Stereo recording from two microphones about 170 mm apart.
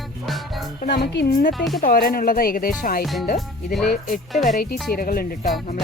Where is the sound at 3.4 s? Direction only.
Centre (ahead or behind).